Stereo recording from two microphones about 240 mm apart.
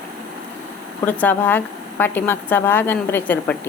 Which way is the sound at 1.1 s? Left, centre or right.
Centre.